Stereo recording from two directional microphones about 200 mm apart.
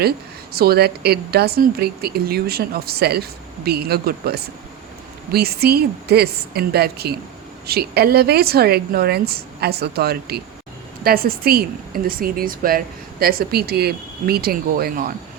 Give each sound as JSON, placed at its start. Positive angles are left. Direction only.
{"t": 0.5, "sound": "speech", "side_deg": -50}